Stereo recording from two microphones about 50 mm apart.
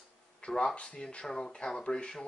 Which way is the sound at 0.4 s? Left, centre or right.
Left.